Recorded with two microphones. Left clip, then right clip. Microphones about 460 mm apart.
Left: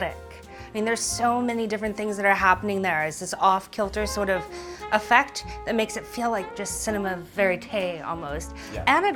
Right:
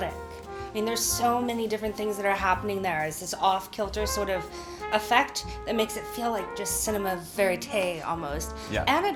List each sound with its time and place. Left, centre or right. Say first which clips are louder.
0.8 s speech: left 2 dB; left